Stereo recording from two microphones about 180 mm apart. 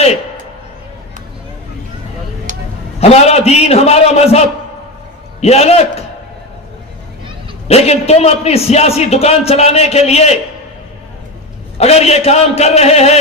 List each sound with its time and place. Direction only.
2.5 s a sound: 45° right (ahead or behind)
3.0 s a man's voice: 35° left (ahead or behind)
7.7 s a man's voice: 35° left (ahead or behind)
11.8 s a man's voice: 35° left (ahead or behind)